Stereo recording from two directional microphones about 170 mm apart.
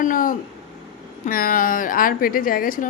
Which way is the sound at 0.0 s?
55° left (ahead or behind).